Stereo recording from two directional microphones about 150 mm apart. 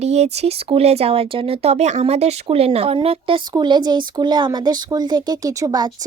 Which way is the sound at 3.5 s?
30° right (ahead or behind).